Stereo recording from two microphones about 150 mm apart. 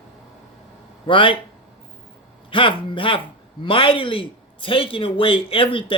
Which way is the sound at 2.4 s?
35° left (ahead or behind).